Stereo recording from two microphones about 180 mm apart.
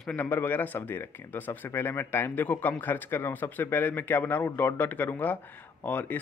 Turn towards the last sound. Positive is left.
turn(degrees=10)  # may be behind; listen again after turning